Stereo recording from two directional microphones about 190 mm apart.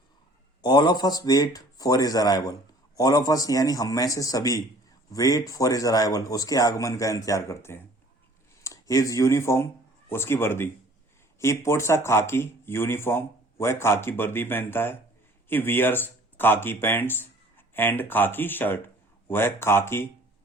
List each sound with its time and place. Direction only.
0.6 s speech: 20° left (ahead or behind)